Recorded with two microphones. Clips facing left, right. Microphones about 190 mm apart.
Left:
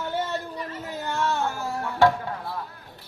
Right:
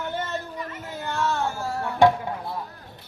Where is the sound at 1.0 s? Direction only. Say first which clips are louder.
Even; 15° left (ahead or behind).